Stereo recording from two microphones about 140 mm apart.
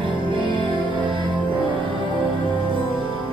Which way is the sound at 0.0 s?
35° right (ahead or behind).